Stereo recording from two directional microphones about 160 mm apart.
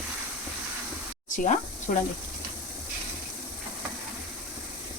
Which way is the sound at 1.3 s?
55° left (ahead or behind).